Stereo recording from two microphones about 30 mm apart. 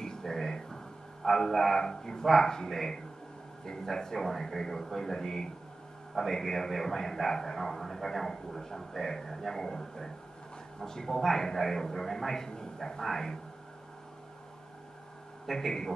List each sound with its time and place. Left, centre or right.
0.0 s a sound: centre
1.2 s a man's voice: centre
15.5 s speech: left